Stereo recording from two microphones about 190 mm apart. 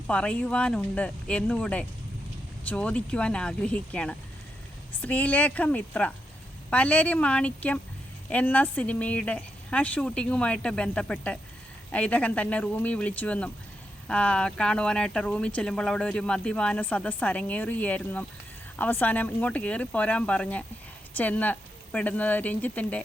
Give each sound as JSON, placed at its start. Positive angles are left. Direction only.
{"t": 0.1, "sound": "speech", "side_deg": 5}